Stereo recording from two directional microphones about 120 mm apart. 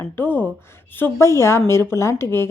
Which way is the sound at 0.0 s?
15° left (ahead or behind).